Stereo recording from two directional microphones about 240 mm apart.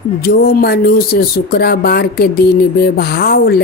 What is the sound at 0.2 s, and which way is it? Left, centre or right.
Speech, left.